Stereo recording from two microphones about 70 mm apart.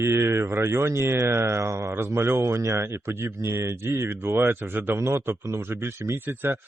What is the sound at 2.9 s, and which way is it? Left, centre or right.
Speech, right.